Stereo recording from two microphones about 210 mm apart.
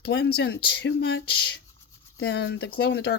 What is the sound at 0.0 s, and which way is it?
Speech, 55° left (ahead or behind).